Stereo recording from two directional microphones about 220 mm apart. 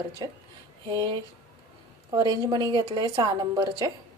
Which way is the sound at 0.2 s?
20° right (ahead or behind).